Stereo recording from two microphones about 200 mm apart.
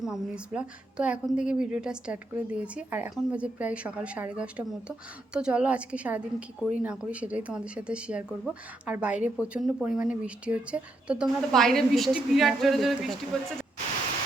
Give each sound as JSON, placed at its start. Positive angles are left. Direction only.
{"t": 0.0, "sound": "a woman's voice", "side_deg": -5}